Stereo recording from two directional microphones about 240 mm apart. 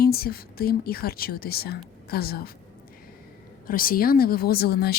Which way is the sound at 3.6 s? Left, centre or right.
Left.